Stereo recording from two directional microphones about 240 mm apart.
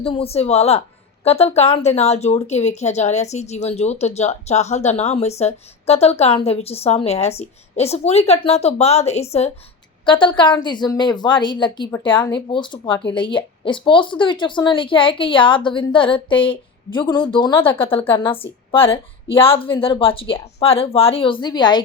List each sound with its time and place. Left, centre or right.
0.0 s a woman's voice: left